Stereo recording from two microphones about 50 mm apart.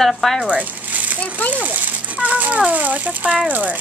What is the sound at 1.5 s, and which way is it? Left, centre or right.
A child's voice, right.